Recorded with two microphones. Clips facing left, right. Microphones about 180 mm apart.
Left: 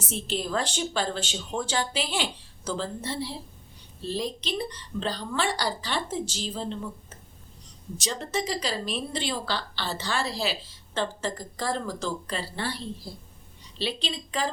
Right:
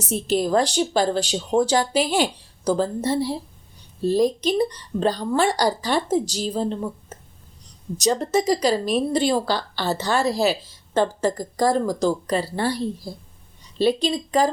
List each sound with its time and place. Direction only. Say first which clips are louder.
0.1 s a woman's voice: right 9 dB; 40° right (ahead or behind)